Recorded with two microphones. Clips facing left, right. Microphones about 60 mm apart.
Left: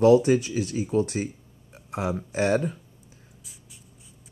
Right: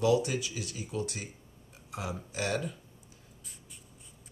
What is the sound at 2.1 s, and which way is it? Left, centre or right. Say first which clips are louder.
Speech: left 10 dB; left.